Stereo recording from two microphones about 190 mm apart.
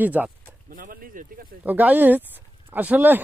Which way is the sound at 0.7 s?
50° right (ahead or behind).